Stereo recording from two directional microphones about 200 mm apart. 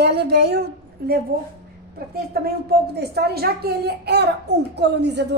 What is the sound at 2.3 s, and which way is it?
A woman's voice, 50° right (ahead or behind).